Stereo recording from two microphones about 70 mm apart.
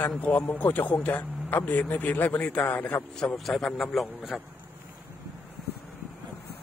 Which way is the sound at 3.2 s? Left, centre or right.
Centre.